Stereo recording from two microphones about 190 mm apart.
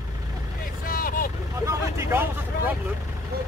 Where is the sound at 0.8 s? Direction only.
50° left (ahead or behind).